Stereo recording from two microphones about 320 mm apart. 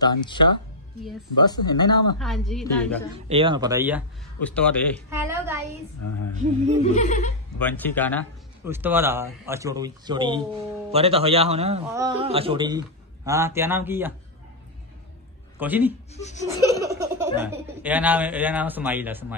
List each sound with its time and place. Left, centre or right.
0.0 s speech: centre
2.1 s a woman's voice: centre
3.3 s a man's voice: centre
4.4 s a woman's voice: centre
5.1 s a man's voice: centre
5.9 s speech: left
6.3 s a man's voice: right
6.8 s laughter: left
7.5 s a woman's voice: centre
8.6 s a man's voice: centre
15.6 s a woman's voice: centre
16.1 s laughter: left
16.4 s speech: centre